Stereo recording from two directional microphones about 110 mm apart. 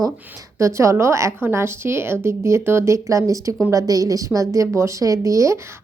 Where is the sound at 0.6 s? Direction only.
25° right (ahead or behind).